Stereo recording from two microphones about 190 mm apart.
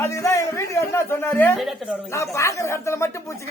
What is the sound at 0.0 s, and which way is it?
Music, 15° left (ahead or behind).